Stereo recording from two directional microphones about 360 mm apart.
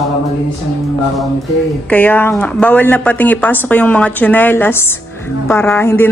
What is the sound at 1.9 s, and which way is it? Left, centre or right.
Speech, centre.